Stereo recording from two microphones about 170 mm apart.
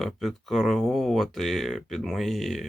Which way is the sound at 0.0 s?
Centre (ahead or behind).